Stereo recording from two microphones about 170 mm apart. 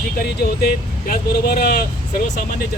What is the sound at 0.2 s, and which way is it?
Speech, 60° left (ahead or behind).